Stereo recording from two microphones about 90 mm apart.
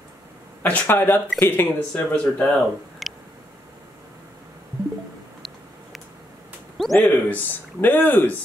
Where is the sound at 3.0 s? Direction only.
Centre (ahead or behind).